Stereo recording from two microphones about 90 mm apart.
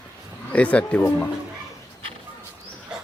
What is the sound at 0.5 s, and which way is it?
Speech, 15° left (ahead or behind).